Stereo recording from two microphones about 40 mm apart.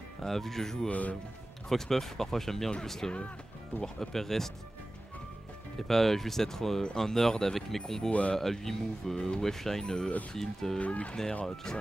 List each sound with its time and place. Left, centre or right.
0.2 s speech: centre
0.8 s speech: left
1.7 s speech: centre
5.8 s speech: centre
8.1 s speech: left
8.4 s speech: centre
10.8 s speech: left
11.4 s speech: centre